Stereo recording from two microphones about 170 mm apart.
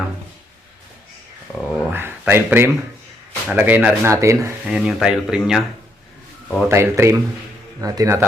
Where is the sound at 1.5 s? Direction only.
5° left (ahead or behind).